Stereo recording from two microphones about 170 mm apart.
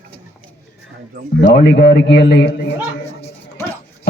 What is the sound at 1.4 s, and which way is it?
A man's voice, 80° left.